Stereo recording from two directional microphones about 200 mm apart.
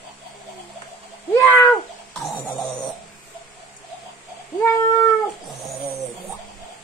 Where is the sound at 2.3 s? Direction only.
10° left (ahead or behind).